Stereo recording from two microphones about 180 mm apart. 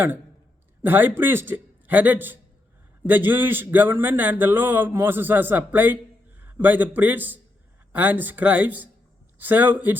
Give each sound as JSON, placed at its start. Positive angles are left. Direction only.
{"t": 0.8, "sound": "a man's voice", "side_deg": -10}